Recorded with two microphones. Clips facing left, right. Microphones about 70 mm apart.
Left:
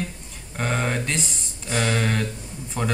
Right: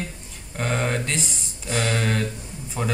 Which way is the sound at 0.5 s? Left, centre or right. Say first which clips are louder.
Even; centre.